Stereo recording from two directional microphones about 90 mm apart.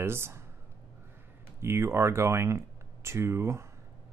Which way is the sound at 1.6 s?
30° right (ahead or behind).